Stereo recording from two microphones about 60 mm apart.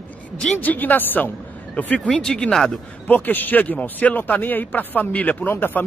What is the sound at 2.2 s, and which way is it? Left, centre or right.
Speech, centre.